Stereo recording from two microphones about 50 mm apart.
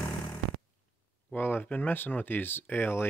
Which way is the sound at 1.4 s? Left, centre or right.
Left.